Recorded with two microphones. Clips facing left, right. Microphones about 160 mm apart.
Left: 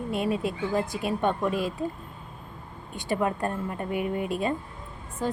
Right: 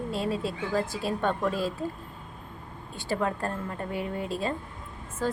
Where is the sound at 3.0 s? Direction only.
15° left (ahead or behind).